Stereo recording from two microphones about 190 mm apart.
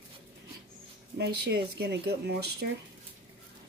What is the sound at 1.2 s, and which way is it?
Speech, 60° right (ahead or behind).